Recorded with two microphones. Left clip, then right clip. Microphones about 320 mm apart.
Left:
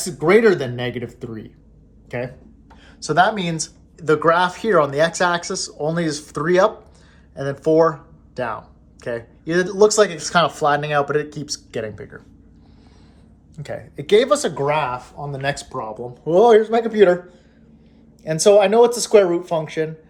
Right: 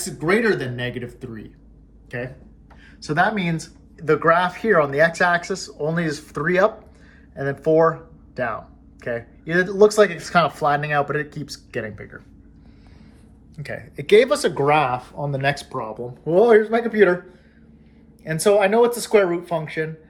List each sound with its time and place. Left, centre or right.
0.0 s speech: centre
13.6 s speech: centre
18.2 s speech: centre